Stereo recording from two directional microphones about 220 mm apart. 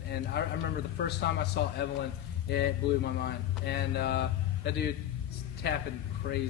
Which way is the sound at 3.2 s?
50° left (ahead or behind).